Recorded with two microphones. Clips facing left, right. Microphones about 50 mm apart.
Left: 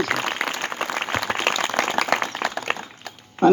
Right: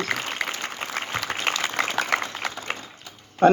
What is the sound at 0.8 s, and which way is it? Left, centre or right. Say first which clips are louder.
Applause: left 5 dB; left.